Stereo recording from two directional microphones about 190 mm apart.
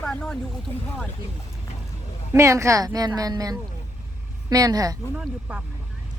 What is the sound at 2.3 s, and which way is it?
Speech, 15° right (ahead or behind).